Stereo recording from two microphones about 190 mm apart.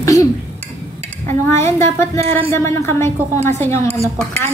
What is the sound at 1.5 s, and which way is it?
A woman's voice, 15° left (ahead or behind).